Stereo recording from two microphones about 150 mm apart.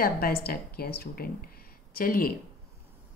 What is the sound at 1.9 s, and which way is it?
Speech, 75° left (ahead or behind).